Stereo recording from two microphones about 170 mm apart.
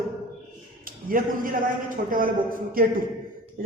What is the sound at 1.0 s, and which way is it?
A man's voice, 55° right (ahead or behind).